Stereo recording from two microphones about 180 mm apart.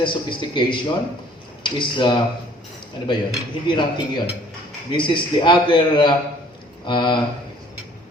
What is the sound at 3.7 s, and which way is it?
Speech, 25° left (ahead or behind).